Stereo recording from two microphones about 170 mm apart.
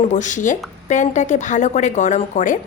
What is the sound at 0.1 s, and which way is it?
Speech, 45° left (ahead or behind).